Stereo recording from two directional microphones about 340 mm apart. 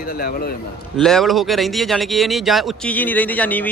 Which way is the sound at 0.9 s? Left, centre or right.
Centre.